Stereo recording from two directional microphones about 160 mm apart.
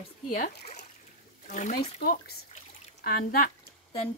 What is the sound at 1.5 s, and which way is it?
Speech, 50° left (ahead or behind).